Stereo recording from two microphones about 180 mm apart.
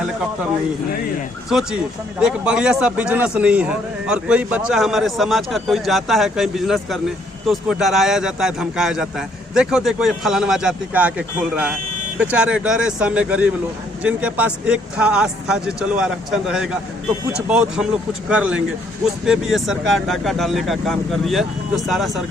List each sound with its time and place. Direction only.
1.5 s a man's voice: 5° right (ahead or behind)